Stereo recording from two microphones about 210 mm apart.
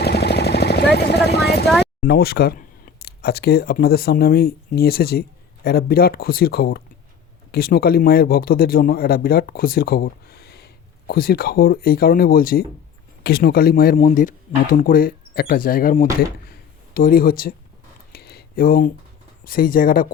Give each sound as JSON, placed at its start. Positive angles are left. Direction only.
{"t": 0.0, "sound": "vehicle", "side_deg": 50}
{"t": 1.8, "sound": "a man's voice", "side_deg": 50}
{"t": 13.9, "sound": "speech", "side_deg": 35}
{"t": 16.5, "sound": "a sound", "side_deg": 45}
{"t": 19.5, "sound": "a man's voice", "side_deg": 45}